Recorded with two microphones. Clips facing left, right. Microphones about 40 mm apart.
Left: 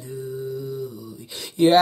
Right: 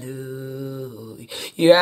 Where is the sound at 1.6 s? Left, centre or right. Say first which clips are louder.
Right 4 dB; right.